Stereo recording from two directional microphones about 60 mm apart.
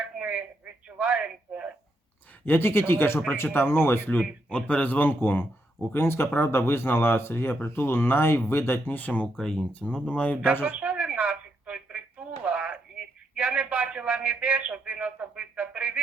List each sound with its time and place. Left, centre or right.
0.2 s a sound: centre
2.4 s speech: left
4.4 s speech: left
9.4 s speech: centre
10.6 s a sound: centre
13.3 s a man's voice: centre